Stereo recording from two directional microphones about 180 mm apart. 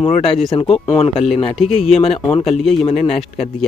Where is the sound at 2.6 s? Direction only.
Centre (ahead or behind).